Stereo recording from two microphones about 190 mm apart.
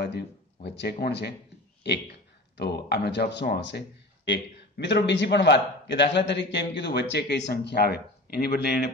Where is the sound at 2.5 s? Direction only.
60° left (ahead or behind).